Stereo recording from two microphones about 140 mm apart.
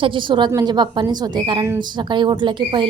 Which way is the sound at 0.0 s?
35° right (ahead or behind).